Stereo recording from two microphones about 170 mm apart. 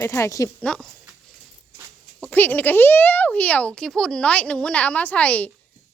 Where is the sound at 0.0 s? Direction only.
15° left (ahead or behind).